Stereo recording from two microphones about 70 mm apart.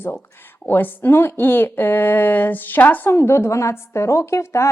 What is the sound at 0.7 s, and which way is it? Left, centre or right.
Speech, left.